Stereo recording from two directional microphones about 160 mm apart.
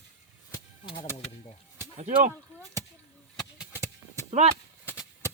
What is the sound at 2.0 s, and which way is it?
Speech, 50° right (ahead or behind).